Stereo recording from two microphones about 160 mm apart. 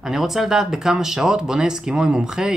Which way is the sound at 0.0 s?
Centre (ahead or behind).